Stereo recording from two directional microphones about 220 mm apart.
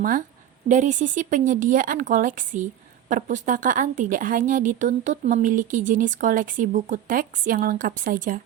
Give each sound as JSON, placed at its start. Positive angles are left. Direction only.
{"t": 0.0, "sound": "a woman's voice", "side_deg": -35}